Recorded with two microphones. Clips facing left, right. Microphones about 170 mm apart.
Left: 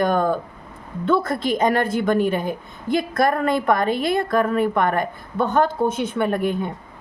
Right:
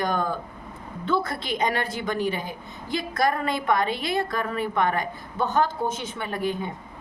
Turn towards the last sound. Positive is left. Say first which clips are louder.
# left 7 dB
turn(degrees=55)  # may be behind; listen again after turning